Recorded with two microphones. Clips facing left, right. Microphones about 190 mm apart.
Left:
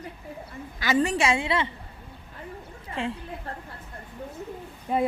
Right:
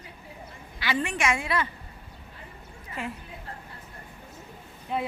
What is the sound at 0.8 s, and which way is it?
Speech, 40° left (ahead or behind).